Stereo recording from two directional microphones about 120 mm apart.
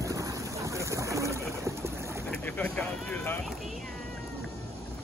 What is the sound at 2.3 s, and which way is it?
Speech, 15° left (ahead or behind).